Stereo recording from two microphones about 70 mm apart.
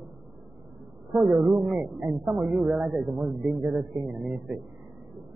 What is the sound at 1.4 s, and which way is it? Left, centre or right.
Speech, centre.